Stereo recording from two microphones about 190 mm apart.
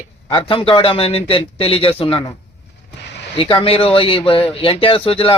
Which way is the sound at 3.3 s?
30° left (ahead or behind).